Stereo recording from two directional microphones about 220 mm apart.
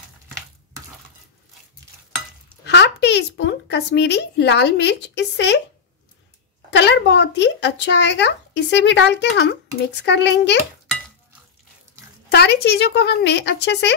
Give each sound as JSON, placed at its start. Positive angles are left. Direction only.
{"t": 2.6, "sound": "speech", "side_deg": 50}
{"t": 6.7, "sound": "speech", "side_deg": 50}
{"t": 12.3, "sound": "speech", "side_deg": 50}